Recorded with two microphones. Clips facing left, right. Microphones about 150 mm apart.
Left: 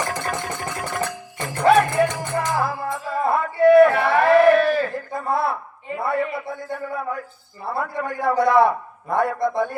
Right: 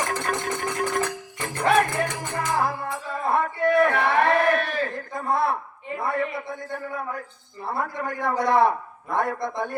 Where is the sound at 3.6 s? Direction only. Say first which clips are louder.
Left 10 dB; 30° left (ahead or behind).